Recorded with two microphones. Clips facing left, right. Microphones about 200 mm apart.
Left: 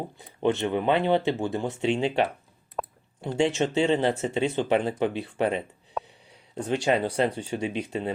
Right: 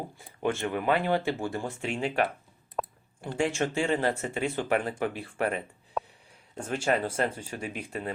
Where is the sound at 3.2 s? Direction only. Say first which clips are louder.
Left 4 dB; 20° left (ahead or behind).